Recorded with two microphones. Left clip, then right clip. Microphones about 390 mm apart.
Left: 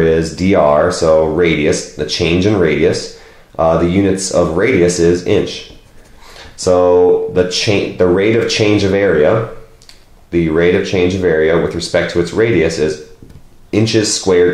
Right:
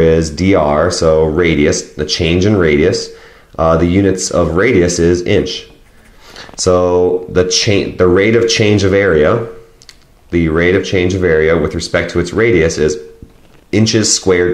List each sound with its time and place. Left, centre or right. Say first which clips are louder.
0.0 s speech: right 2 dB; right
6.6 s speech: left 1 dB; right
10.3 s speech: even; right